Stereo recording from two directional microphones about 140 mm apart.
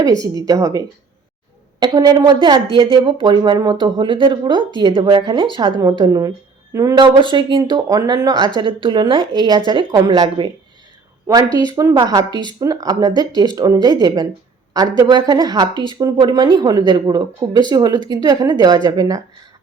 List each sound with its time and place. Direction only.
0.0 s a woman's voice: 25° right (ahead or behind)
11.5 s a woman's voice: 30° right (ahead or behind)